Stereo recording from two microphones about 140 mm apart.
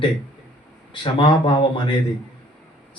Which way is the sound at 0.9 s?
35° left (ahead or behind).